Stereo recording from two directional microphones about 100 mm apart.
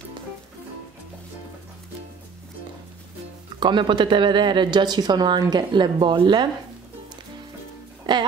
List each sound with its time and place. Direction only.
3.5 s a woman's voice: 50° right (ahead or behind)
8.1 s music: 50° right (ahead or behind)